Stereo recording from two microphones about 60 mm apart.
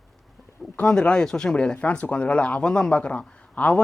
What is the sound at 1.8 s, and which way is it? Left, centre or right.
Speech, left.